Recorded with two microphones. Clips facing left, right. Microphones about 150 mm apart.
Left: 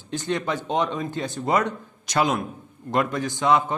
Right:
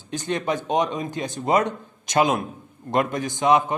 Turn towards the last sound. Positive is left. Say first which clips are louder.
# right 2 dB
turn(degrees=-15)  # may be behind; listen again after turning